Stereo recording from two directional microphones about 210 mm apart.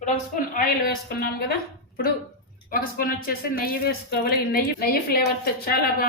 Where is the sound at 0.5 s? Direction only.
45° left (ahead or behind).